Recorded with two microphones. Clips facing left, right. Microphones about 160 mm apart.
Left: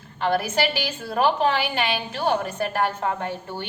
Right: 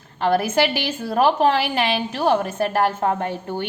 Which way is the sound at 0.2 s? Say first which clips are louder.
Right 4 dB; 45° right (ahead or behind).